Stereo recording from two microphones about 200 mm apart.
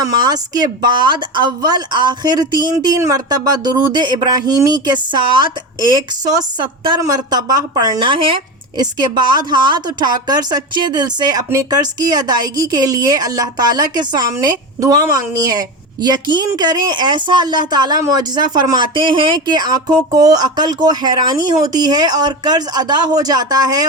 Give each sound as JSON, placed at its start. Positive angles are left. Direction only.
{"t": 0.0, "sound": "a woman's voice", "side_deg": -20}